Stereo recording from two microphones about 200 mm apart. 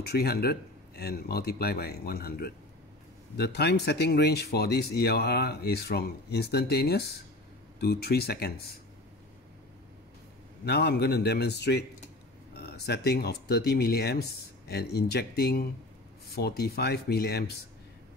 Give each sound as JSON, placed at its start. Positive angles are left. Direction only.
{"t": 0.0, "sound": "speech", "side_deg": 50}
{"t": 10.6, "sound": "a man's voice", "side_deg": 55}